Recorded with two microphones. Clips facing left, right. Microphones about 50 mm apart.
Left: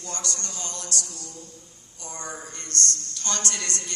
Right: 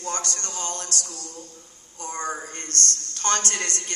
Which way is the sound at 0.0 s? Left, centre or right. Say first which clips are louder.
Right 4 dB; right.